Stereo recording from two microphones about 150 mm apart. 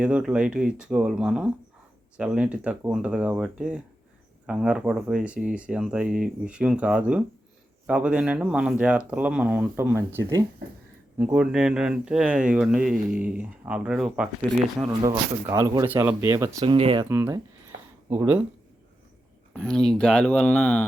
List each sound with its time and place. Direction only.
0.0 s speech: 5° right (ahead or behind)
14.8 s speech: 20° right (ahead or behind)
16.6 s speech: 35° right (ahead or behind)
17.1 s speech: 15° right (ahead or behind)
19.5 s speech: 5° left (ahead or behind)